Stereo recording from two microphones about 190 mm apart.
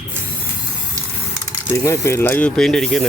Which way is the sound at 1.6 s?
15° left (ahead or behind).